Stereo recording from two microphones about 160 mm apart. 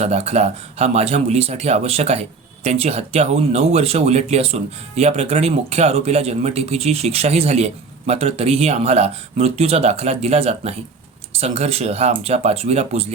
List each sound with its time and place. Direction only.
0.0 s speech: 45° right (ahead or behind)